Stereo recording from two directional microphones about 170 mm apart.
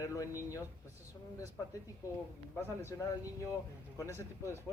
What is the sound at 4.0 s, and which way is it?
Speech, 15° left (ahead or behind).